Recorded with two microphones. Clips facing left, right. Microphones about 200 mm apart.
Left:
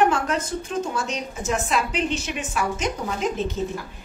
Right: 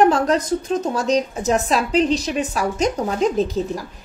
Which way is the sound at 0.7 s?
40° right (ahead or behind).